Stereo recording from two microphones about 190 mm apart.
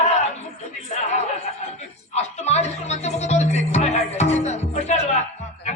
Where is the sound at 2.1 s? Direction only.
35° left (ahead or behind).